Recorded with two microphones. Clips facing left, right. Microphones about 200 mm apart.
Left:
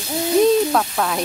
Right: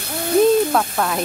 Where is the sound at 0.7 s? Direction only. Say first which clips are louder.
Even; centre (ahead or behind).